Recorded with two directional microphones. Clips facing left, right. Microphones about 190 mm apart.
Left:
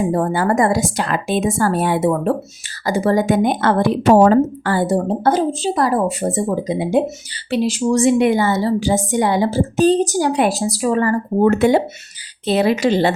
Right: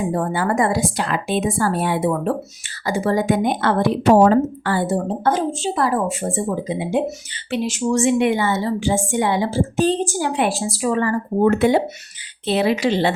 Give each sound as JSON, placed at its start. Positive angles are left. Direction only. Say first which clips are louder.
{"t": 0.1, "sound": "a woman's voice", "louder": "left 3 dB", "side_deg": 40}